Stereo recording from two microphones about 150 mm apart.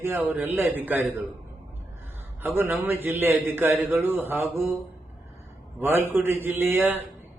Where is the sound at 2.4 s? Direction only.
15° right (ahead or behind).